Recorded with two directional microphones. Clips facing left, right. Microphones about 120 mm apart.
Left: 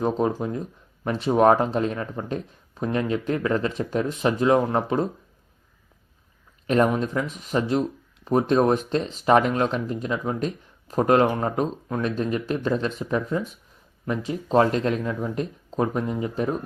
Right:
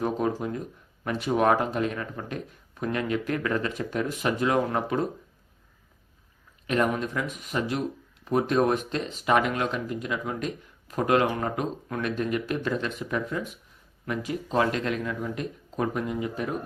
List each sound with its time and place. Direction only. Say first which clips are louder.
0.0 s speech: left 3 dB; 25° left (ahead or behind)
6.7 s speech: left 5 dB; 30° left (ahead or behind)